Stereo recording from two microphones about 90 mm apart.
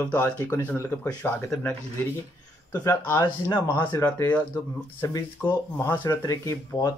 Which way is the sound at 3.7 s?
55° left (ahead or behind).